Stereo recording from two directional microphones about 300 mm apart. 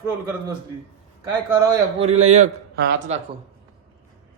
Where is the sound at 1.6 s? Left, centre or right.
Centre.